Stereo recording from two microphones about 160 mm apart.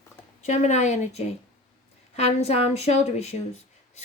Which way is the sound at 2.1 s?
40° left (ahead or behind).